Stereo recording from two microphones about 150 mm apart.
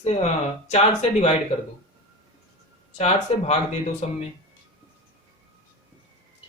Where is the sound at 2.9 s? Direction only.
45° left (ahead or behind).